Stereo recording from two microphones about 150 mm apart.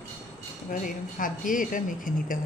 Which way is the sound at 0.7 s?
65° left (ahead or behind).